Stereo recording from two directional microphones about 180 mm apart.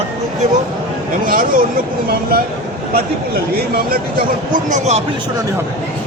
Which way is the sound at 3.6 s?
55° right (ahead or behind).